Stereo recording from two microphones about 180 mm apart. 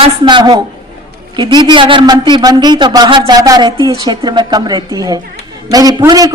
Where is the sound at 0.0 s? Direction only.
25° right (ahead or behind).